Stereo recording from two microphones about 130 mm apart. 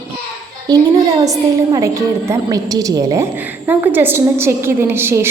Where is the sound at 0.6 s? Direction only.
30° right (ahead or behind).